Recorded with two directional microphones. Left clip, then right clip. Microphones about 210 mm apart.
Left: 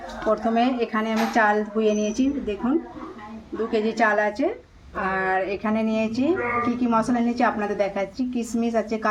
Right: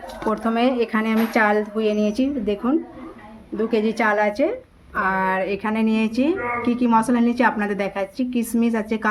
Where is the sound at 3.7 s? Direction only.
55° right (ahead or behind).